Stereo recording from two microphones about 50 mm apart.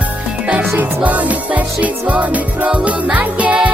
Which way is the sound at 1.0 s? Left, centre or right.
Right.